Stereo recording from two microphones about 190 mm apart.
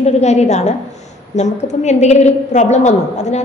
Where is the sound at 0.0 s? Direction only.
35° left (ahead or behind).